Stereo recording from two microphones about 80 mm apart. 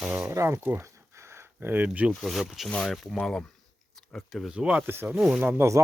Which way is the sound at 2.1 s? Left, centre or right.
Centre.